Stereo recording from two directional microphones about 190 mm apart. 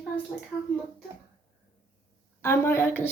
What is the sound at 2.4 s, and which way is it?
Speech, 15° left (ahead or behind).